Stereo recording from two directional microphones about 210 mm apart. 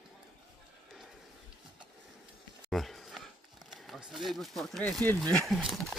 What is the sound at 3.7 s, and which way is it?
Speech, centre (ahead or behind).